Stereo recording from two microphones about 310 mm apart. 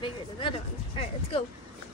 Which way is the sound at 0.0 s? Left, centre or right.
Centre.